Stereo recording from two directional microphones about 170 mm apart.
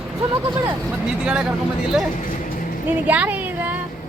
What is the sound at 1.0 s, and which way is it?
Speech, 5° right (ahead or behind).